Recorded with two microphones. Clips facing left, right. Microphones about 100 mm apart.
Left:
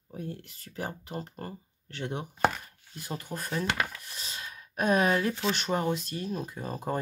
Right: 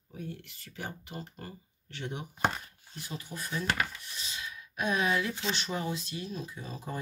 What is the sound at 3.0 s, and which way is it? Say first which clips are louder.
Speech: left 4 dB; 50° left (ahead or behind).